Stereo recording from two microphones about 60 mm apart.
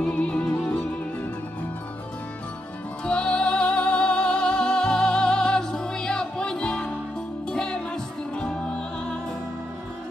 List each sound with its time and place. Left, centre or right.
0.0 s music: centre
3.1 s music: centre